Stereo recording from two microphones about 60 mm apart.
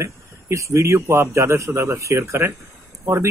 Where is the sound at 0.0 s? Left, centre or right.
Right.